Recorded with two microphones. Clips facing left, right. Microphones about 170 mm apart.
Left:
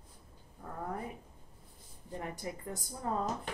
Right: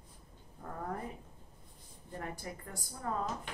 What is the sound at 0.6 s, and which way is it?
Speech, 5° left (ahead or behind).